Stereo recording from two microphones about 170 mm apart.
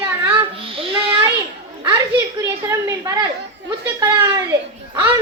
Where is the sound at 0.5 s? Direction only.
35° right (ahead or behind).